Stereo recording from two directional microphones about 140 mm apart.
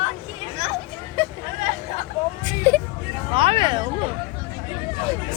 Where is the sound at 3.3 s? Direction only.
40° right (ahead or behind).